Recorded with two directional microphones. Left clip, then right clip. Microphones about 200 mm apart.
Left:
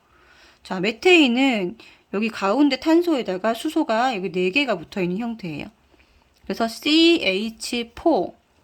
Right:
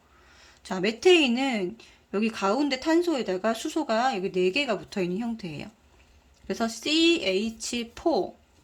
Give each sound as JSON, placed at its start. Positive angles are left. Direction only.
{"t": 0.3, "sound": "speech", "side_deg": 15}